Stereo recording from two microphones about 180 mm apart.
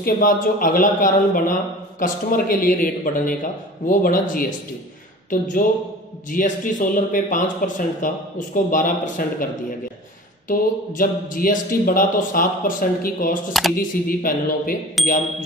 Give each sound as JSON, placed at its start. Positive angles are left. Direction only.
{"t": 0.0, "sound": "a man's voice", "side_deg": 50}
{"t": 10.5, "sound": "a man's voice", "side_deg": 50}
{"t": 13.5, "sound": "speech", "side_deg": 0}
{"t": 14.0, "sound": "a man's voice", "side_deg": 50}